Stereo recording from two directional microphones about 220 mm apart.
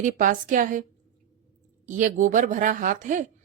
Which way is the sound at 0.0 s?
35° right (ahead or behind).